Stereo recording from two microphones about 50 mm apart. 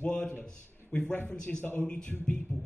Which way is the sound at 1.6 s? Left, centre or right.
Left.